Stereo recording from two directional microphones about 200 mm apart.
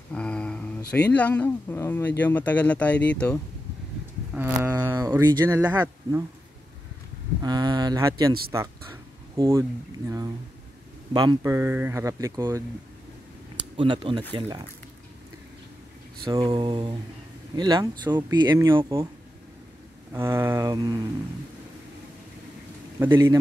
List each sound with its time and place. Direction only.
0.1 s a sound: 5° left (ahead or behind)
1.0 s speech: 5° left (ahead or behind)
4.6 s speech: 15° right (ahead or behind)
7.4 s speech: 20° right (ahead or behind)
13.7 s speech: 25° right (ahead or behind)
16.3 s speech: 20° right (ahead or behind)
20.1 s speech: 15° right (ahead or behind)
22.9 s a man's voice: 10° right (ahead or behind)